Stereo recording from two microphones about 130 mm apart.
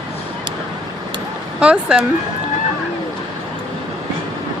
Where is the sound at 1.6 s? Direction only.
5° right (ahead or behind).